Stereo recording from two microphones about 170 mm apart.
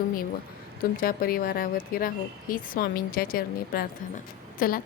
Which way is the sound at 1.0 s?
60° left (ahead or behind).